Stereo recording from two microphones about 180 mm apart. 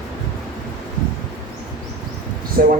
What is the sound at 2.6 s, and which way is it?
Speech, 55° right (ahead or behind).